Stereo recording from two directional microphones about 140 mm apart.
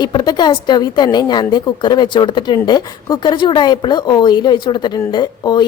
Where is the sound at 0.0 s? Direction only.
30° left (ahead or behind).